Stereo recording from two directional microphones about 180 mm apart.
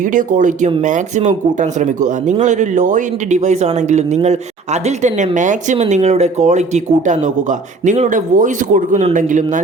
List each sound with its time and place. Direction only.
0.1 s speech: 45° right (ahead or behind)